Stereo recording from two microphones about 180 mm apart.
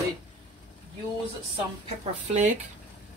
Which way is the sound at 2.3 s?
40° right (ahead or behind).